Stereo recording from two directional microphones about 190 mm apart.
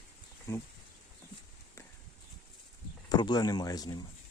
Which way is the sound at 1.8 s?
15° left (ahead or behind).